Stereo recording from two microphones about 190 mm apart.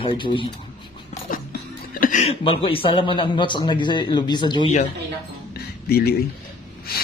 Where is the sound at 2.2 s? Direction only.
30° left (ahead or behind).